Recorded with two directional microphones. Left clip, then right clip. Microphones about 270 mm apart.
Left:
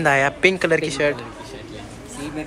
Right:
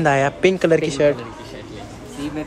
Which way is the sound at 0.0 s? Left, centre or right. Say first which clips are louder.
Even; centre.